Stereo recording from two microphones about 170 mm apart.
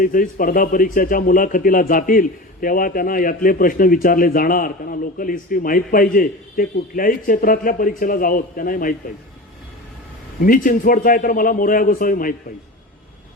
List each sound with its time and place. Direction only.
0.0 s a man's voice: 55° left (ahead or behind)
10.4 s a man's voice: 50° left (ahead or behind)